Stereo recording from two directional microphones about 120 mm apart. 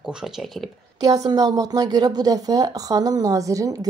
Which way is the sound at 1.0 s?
30° right (ahead or behind).